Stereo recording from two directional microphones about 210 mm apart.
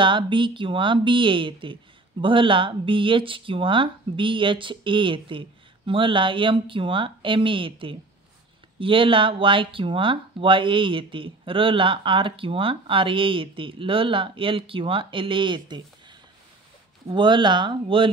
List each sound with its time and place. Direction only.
0.0 s speech: 25° right (ahead or behind)